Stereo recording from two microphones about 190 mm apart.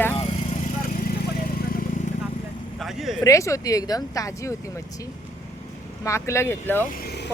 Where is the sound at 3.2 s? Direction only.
15° left (ahead or behind).